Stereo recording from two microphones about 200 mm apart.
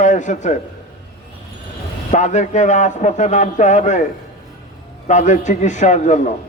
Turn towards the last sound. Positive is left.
turn(degrees=35)  # may be behind; listen again after turning